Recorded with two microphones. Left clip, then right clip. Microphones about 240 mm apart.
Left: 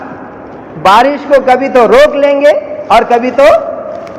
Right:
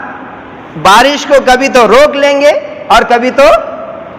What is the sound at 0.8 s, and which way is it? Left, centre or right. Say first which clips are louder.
A man's voice: right 1 dB; right.